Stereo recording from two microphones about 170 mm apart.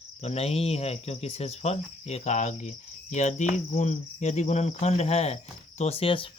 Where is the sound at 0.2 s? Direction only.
40° left (ahead or behind).